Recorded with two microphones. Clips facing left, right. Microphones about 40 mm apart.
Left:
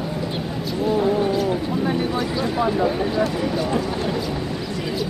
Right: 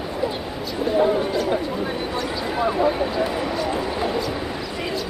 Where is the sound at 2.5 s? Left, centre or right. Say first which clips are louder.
Right 1 dB; centre.